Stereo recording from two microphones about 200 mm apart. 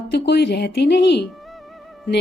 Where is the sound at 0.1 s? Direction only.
55° left (ahead or behind).